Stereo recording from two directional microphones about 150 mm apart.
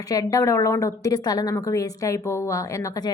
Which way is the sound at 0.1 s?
25° left (ahead or behind).